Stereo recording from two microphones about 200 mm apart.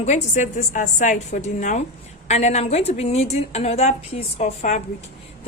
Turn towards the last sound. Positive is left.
turn(degrees=35)  # may be behind; listen again after turning